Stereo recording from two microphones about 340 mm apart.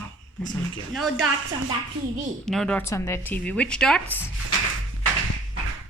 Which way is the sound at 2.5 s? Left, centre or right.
Centre.